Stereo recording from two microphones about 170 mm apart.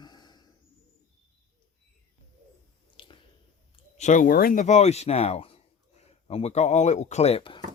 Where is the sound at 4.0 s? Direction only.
45° left (ahead or behind); by 7.6 s 30° left (ahead or behind).